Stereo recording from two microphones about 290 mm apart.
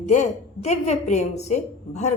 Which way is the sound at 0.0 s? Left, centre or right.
Left.